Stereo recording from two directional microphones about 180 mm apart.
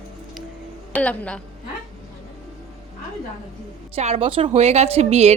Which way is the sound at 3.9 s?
35° right (ahead or behind).